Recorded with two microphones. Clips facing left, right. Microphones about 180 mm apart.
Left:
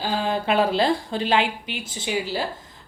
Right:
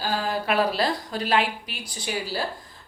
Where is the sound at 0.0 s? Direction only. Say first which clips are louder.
Left 2 dB; 25° left (ahead or behind).